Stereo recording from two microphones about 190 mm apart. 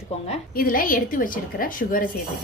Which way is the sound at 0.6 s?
50° left (ahead or behind).